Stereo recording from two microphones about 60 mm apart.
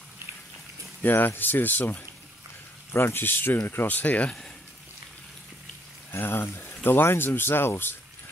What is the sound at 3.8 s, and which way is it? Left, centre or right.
Speech, left.